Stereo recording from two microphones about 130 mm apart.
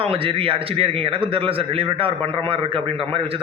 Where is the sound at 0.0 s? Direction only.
45° right (ahead or behind).